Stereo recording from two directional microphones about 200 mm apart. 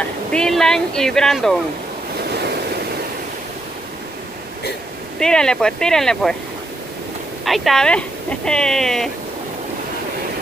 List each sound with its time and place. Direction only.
0.3 s speech: 5° left (ahead or behind)
2.2 s waves: 55° right (ahead or behind)
5.2 s speech: 5° left (ahead or behind)
7.4 s speech: centre (ahead or behind)